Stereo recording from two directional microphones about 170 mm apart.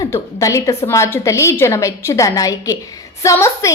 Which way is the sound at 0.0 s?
20° left (ahead or behind).